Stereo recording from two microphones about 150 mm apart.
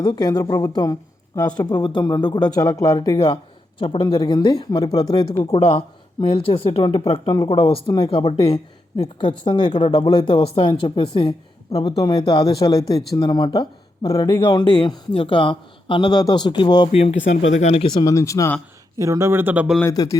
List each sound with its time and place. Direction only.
0.0 s speech: 25° left (ahead or behind)
1.7 s speech: 30° left (ahead or behind)
3.8 s speech: 35° left (ahead or behind)
5.5 s speech: 40° left (ahead or behind)
16.9 s speech: 45° left (ahead or behind)
17.9 s speech: 25° left (ahead or behind)
18.9 s speech: 20° right (ahead or behind)
19.8 s speech: 25° left (ahead or behind)